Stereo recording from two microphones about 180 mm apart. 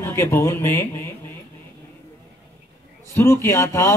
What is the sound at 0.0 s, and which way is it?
Speech, 15° left (ahead or behind).